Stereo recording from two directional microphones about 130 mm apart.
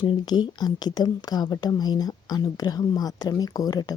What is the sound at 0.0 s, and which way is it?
A woman's voice, 35° left (ahead or behind).